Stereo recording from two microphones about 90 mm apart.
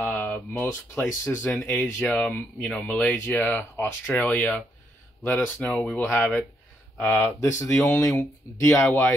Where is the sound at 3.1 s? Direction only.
20° left (ahead or behind).